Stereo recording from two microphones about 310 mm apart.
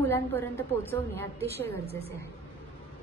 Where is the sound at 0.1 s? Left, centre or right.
Centre.